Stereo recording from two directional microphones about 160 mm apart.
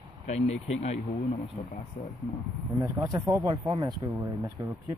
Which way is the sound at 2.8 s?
20° right (ahead or behind).